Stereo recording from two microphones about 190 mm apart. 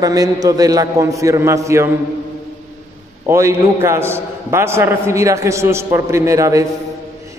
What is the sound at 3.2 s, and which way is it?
A man's voice, 15° right (ahead or behind).